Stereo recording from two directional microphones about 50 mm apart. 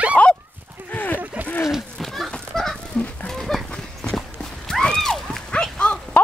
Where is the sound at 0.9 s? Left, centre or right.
Left.